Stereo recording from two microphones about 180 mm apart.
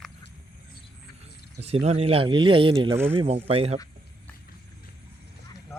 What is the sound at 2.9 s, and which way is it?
Speech, 10° right (ahead or behind).